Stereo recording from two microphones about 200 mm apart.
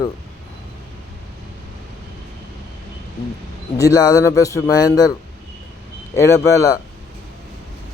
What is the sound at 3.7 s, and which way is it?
Speech, 15° left (ahead or behind).